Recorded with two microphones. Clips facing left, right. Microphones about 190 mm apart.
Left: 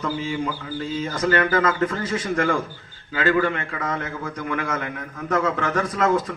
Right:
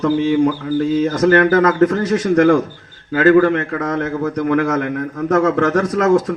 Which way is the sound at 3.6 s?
70° right (ahead or behind).